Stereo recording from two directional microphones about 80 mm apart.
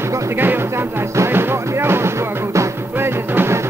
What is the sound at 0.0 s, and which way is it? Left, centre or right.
Speech, right.